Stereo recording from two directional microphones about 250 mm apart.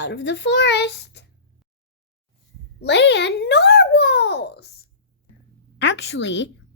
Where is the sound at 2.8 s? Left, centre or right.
Left.